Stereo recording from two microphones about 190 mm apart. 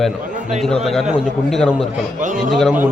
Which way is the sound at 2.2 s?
40° right (ahead or behind).